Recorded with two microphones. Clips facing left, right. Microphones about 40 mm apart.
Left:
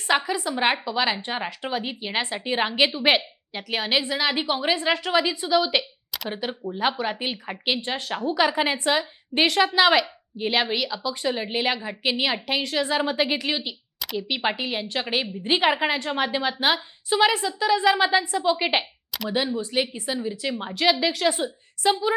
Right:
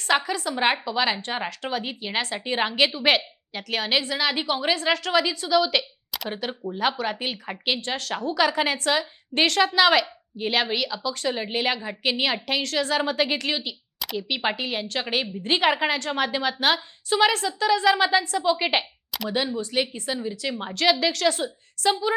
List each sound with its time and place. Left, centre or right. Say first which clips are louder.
0.1 s a woman's voice: even; centre
6.1 s a woman's voice: even; centre
6.7 s a woman's voice: even; centre
7.9 s a woman's voice: left 1 dB; centre
20.7 s a woman's voice: even; centre
21.8 s a woman's voice: left 1 dB; centre